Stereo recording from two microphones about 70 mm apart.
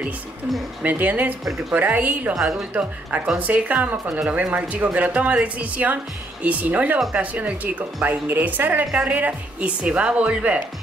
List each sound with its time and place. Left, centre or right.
0.8 s speech: right
2.3 s speech: centre
2.7 s speech: right